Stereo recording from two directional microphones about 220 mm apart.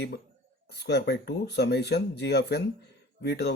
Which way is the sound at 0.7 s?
50° left (ahead or behind).